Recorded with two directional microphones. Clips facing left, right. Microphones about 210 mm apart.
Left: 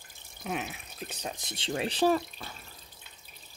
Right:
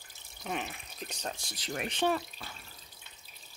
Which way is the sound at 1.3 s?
25° left (ahead or behind).